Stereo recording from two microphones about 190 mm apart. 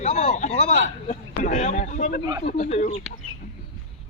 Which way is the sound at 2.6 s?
35° left (ahead or behind).